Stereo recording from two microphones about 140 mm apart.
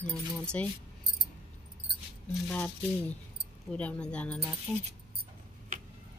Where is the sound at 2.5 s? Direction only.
10° left (ahead or behind).